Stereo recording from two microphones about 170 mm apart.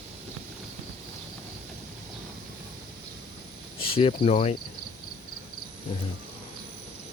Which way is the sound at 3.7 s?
35° left (ahead or behind).